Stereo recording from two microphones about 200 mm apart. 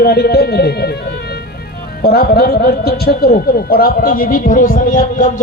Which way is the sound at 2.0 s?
50° left (ahead or behind).